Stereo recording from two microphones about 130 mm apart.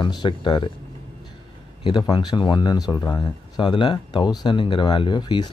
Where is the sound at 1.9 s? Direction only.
35° left (ahead or behind).